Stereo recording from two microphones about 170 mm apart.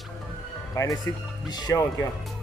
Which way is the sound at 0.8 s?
20° left (ahead or behind).